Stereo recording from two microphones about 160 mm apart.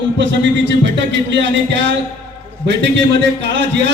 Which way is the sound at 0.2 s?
90° right.